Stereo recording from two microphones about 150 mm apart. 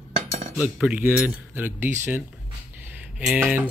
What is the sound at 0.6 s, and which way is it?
Speech, 10° right (ahead or behind).